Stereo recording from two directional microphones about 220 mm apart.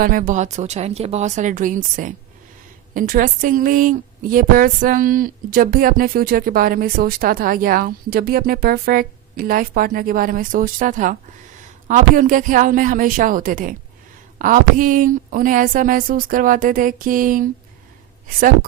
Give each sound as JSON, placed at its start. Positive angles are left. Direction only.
{"t": 0.0, "sound": "speech", "side_deg": -40}